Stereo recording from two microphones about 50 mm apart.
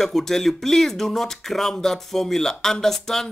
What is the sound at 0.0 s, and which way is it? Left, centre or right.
Speech, centre.